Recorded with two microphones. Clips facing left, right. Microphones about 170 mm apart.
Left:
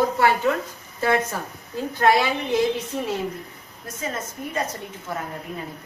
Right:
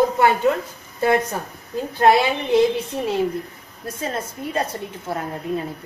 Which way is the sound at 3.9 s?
30° right (ahead or behind).